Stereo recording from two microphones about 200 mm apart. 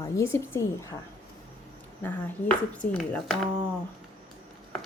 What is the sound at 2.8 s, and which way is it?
Speech, 10° left (ahead or behind).